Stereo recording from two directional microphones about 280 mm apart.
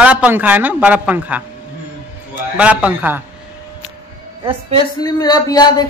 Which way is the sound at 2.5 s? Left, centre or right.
Centre.